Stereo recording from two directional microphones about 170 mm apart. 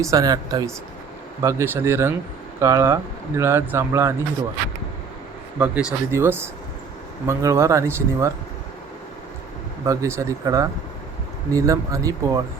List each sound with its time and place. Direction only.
0.0 s speech: 20° right (ahead or behind)
5.5 s speech: 10° right (ahead or behind)
9.8 s speech: 15° right (ahead or behind)